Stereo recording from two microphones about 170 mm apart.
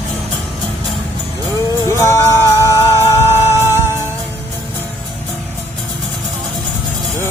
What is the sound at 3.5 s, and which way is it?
Music, 15° right (ahead or behind).